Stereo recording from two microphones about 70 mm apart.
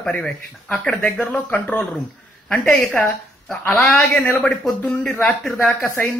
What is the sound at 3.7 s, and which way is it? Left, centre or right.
Speech, centre.